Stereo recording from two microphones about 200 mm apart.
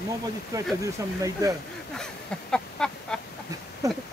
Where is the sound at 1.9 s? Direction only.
5° left (ahead or behind).